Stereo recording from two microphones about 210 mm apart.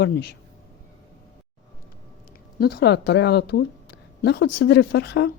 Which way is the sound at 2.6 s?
50° left (ahead or behind).